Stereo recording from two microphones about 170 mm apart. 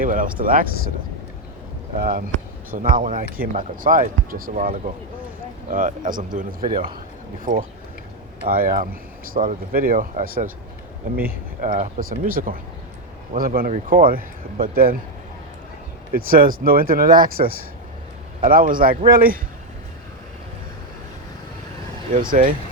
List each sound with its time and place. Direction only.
0.0 s speech: 50° right (ahead or behind)
2.0 s speech: 55° right (ahead or behind)
6.7 s speech: 30° right (ahead or behind)
7.3 s speech: 55° right (ahead or behind)
11.6 s speech: 50° right (ahead or behind)
16.1 s speech: 60° right (ahead or behind)
22.1 s speech: 55° right (ahead or behind)